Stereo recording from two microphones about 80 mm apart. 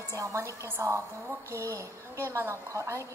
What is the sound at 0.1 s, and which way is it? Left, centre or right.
A woman's voice, right.